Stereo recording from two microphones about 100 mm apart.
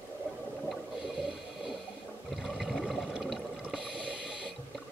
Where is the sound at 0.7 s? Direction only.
Centre (ahead or behind).